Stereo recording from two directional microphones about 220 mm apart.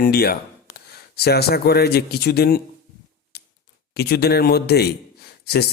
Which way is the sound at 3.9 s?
45° left (ahead or behind).